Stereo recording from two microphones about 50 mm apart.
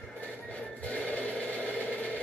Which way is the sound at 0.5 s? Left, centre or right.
Left.